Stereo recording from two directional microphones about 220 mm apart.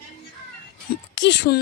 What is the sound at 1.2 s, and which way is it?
Speech, 50° left (ahead or behind).